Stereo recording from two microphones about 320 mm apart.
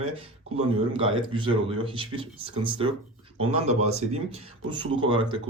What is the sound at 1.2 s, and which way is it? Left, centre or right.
Speech, centre.